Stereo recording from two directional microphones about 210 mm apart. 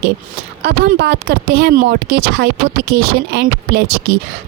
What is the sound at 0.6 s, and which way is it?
Speech, 55° right (ahead or behind).